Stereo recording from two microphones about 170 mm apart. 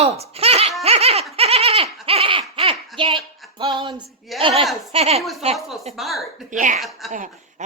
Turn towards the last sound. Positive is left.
turn(degrees=-50)  # may be behind; listen again after turning